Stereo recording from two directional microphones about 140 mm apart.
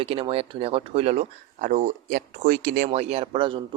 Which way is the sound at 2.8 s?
45° right (ahead or behind).